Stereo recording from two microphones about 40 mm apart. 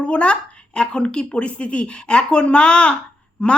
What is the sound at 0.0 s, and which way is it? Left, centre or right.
Speech, left.